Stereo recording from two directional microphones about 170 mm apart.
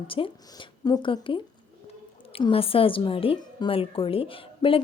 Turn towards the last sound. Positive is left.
turn(degrees=30)  # may be behind; listen again after turning